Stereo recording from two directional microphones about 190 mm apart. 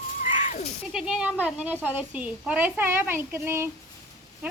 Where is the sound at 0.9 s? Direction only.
5° right (ahead or behind).